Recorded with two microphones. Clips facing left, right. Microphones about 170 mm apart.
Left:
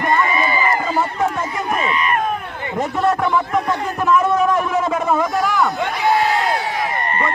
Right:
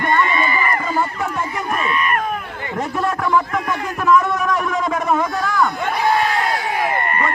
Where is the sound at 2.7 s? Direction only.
20° left (ahead or behind).